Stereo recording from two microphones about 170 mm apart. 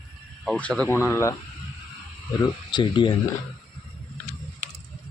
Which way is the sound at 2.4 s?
25° left (ahead or behind).